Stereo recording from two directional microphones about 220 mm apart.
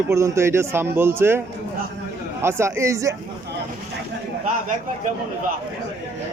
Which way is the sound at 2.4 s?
10° right (ahead or behind).